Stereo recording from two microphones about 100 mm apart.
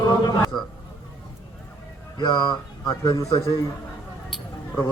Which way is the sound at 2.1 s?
45° left (ahead or behind).